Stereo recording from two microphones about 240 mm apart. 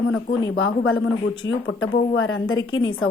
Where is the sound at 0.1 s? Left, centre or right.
Left.